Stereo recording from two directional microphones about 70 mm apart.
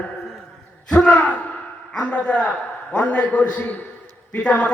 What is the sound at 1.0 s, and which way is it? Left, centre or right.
A man's voice, centre.